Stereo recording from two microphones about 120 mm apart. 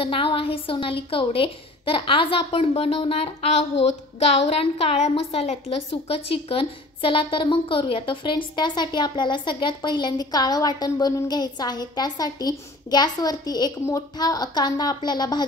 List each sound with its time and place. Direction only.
0.0 s a woman's voice: 50° left (ahead or behind)